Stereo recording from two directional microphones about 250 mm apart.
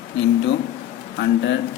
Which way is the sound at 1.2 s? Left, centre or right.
Left.